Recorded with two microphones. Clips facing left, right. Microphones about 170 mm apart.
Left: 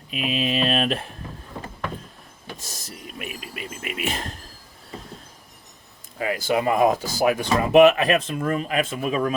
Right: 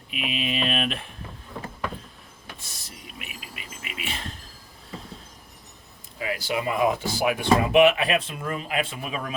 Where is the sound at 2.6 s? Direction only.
40° left (ahead or behind).